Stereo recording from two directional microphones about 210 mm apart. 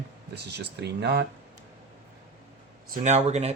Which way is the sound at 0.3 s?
50° right (ahead or behind).